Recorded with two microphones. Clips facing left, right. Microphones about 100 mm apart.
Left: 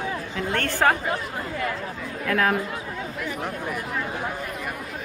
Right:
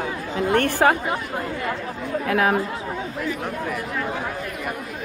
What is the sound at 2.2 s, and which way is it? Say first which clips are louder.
Speech: right 2 dB; 15° right (ahead or behind).